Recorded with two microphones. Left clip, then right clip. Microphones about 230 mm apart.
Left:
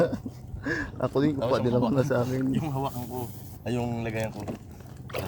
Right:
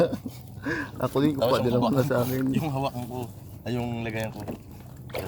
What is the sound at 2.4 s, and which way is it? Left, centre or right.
Speech, right.